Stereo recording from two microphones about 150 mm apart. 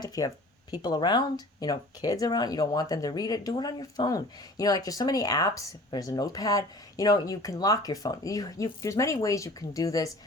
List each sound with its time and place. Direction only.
0.0 s speech: 25° left (ahead or behind)